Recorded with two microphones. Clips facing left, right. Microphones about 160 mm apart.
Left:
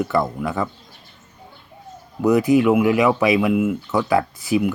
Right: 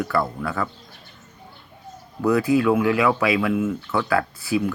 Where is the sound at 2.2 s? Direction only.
20° left (ahead or behind).